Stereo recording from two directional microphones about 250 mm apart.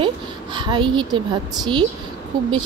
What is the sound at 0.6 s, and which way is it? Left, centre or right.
A woman's voice, centre.